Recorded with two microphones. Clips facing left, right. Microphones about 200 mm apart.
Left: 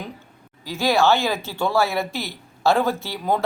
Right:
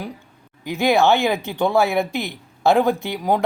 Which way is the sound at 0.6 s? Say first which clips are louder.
Right 2 dB; 20° right (ahead or behind).